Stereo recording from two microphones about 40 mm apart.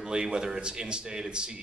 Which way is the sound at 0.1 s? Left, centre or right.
Centre.